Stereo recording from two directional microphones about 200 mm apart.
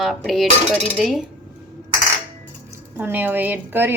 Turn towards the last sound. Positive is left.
turn(degrees=-10)  # may be behind; listen again after turning